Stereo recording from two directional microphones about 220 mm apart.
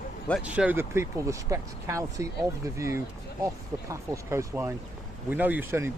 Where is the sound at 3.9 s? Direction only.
10° right (ahead or behind).